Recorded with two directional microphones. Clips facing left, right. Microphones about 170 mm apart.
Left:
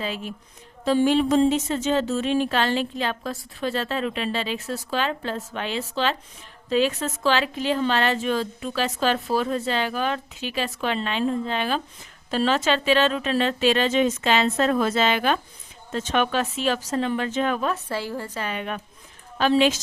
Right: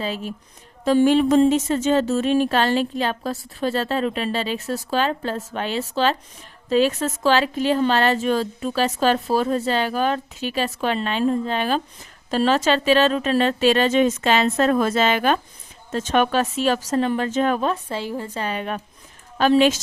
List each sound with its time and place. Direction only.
0.0 s a woman's voice: 35° right (ahead or behind)
0.9 s a woman's voice: 50° right (ahead or behind)
17.8 s a woman's voice: 20° right (ahead or behind)
18.3 s a woman's voice: 35° right (ahead or behind)